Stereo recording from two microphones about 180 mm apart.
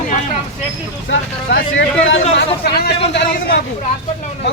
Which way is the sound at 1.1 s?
90° left.